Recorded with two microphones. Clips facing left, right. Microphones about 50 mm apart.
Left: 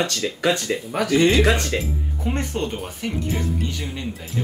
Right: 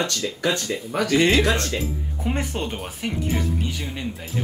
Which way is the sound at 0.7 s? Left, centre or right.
Centre.